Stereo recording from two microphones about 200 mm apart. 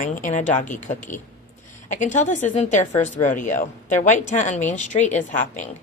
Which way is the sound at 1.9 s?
40° left (ahead or behind).